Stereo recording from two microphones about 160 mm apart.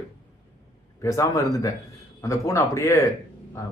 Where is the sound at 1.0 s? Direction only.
20° left (ahead or behind).